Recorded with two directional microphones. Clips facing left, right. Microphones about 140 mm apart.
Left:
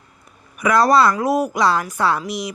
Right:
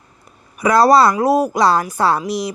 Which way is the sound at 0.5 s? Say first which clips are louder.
Right 3 dB; 35° right (ahead or behind).